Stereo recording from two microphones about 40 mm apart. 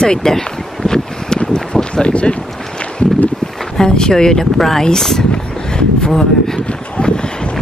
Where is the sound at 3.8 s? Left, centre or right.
Centre.